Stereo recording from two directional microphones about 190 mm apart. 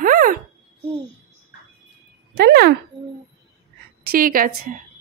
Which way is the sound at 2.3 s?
60° right (ahead or behind).